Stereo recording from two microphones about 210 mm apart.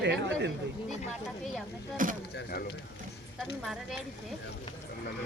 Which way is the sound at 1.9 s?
40° right (ahead or behind).